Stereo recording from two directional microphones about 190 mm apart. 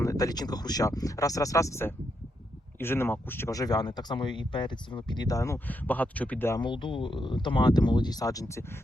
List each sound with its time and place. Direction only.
0.0 s speech: 20° left (ahead or behind)
6.6 s speech: 25° left (ahead or behind)